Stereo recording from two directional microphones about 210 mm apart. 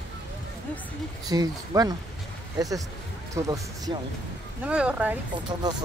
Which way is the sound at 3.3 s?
15° right (ahead or behind).